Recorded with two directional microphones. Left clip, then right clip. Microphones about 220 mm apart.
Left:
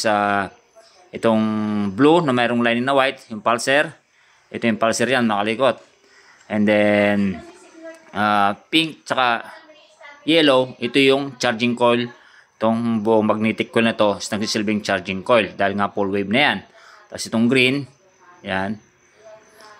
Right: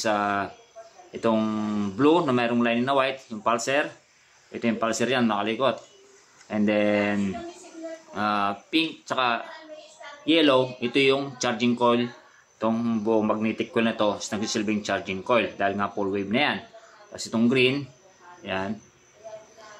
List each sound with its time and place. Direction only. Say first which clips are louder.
0.0 s speech: left 6 dB; 40° left (ahead or behind)